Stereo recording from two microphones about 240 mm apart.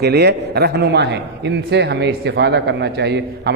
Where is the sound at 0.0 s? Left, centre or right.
Right.